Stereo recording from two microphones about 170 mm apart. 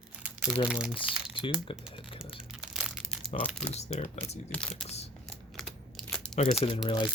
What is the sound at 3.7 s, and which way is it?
Speech, 40° left (ahead or behind).